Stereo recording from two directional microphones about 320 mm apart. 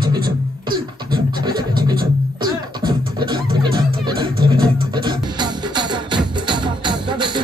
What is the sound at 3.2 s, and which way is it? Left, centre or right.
Music, centre.